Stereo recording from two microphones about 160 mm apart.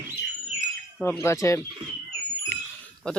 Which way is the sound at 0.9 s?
5° left (ahead or behind).